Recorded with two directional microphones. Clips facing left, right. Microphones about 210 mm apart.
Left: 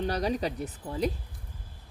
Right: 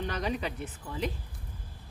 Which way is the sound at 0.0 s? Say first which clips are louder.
Left 4 dB; 35° left (ahead or behind).